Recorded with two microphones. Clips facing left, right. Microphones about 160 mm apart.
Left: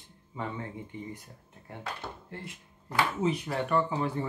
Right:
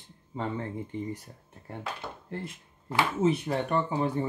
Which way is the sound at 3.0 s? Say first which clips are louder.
Right 3 dB; 20° right (ahead or behind).